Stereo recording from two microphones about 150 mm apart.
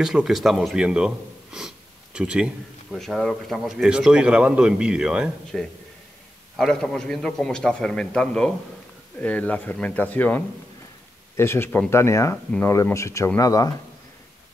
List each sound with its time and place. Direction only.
0.0 s a man's voice: 5° right (ahead or behind); by 13.7 s 25° left (ahead or behind)